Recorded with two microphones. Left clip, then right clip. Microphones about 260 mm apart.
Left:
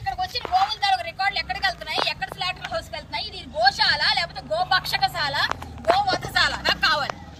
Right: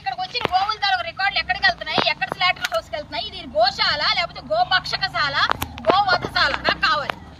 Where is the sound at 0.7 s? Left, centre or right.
Centre.